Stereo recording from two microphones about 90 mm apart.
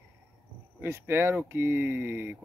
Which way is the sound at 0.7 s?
25° right (ahead or behind).